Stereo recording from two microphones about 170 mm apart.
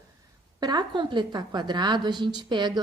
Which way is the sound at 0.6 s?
25° right (ahead or behind).